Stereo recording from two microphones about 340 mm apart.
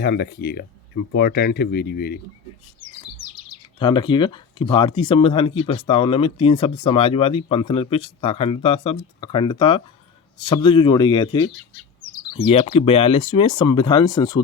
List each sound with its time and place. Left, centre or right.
0.0 s speech: left
3.8 s speech: centre